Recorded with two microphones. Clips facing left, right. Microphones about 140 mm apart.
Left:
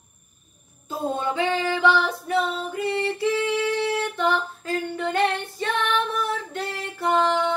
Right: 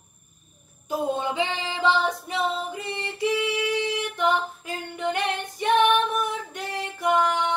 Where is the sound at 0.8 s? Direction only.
15° right (ahead or behind).